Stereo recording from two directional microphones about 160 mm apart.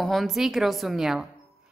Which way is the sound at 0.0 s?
Centre (ahead or behind).